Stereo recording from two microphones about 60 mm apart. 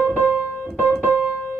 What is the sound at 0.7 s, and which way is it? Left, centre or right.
Keyboard, centre.